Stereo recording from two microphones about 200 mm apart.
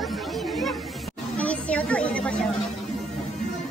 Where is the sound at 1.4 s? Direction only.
5° left (ahead or behind).